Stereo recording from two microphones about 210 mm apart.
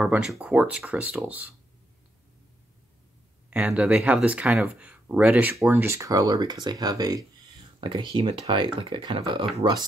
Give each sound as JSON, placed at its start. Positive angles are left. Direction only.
{"t": 0.0, "sound": "speech", "side_deg": -5}
{"t": 3.4, "sound": "speech", "side_deg": -5}